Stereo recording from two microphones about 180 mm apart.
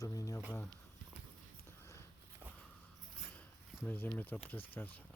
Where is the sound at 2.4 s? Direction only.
10° right (ahead or behind).